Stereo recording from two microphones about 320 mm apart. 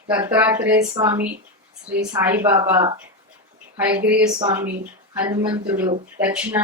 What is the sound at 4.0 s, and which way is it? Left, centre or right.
A woman's voice, centre.